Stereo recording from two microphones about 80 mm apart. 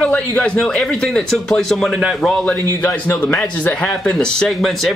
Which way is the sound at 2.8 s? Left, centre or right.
Centre.